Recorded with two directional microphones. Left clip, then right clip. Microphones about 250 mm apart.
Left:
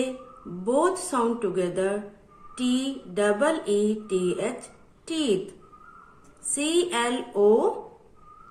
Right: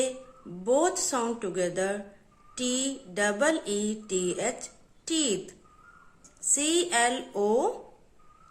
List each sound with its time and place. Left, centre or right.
0.6 s speech: right
6.5 s speech: right